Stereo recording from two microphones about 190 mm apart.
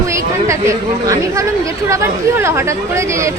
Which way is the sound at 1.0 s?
15° right (ahead or behind).